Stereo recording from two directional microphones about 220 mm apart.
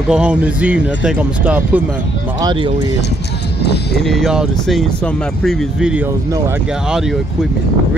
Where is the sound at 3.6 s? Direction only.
50° left (ahead or behind).